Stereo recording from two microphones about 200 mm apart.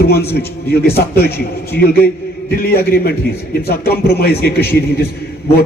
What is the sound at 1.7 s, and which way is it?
A man's voice, 50° left (ahead or behind).